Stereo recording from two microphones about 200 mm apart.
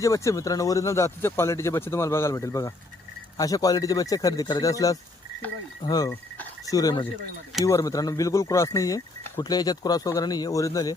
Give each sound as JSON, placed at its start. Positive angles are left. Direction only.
{"t": 0.0, "sound": "speech", "side_deg": 15}
{"t": 6.1, "sound": "speech", "side_deg": 10}